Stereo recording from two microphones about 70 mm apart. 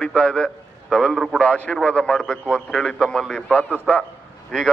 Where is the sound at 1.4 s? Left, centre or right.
Centre.